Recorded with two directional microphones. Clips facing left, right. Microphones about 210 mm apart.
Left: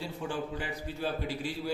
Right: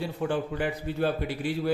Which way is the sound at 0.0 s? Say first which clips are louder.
Right 6 dB; 60° right (ahead or behind).